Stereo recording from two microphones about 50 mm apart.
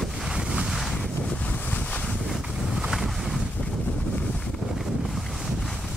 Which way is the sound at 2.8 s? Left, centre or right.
Centre.